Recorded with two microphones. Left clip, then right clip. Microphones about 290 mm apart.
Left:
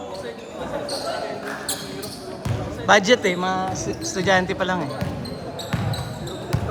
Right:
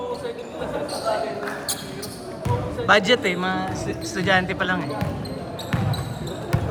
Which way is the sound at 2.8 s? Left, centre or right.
Left.